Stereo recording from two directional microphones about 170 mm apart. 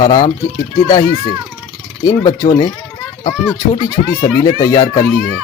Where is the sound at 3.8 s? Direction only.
25° left (ahead or behind).